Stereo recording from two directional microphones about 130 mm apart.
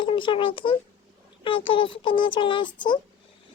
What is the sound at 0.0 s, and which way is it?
A child's voice, 40° left (ahead or behind).